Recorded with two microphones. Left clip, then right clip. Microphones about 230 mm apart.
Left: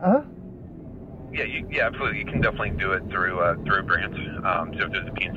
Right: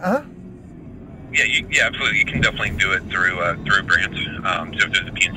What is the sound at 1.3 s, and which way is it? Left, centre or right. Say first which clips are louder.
Speech: right 11 dB; right.